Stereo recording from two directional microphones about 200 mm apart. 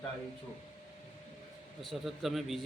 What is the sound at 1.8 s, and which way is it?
Speech, centre (ahead or behind).